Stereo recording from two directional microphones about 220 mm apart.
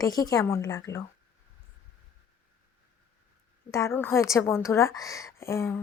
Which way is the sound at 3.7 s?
10° left (ahead or behind).